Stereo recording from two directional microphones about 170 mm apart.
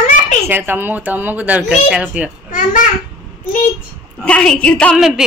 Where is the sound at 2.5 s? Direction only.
50° left (ahead or behind).